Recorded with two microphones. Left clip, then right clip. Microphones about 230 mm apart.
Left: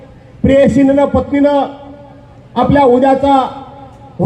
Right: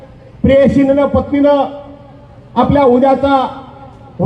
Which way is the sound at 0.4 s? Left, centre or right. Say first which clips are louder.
Even; left.